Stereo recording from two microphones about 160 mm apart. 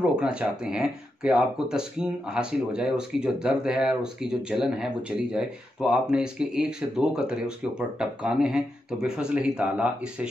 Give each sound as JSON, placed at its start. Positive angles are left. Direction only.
{"t": 0.0, "sound": "speech", "side_deg": -5}